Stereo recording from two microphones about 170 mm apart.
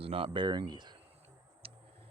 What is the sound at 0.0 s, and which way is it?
Speech, 30° right (ahead or behind).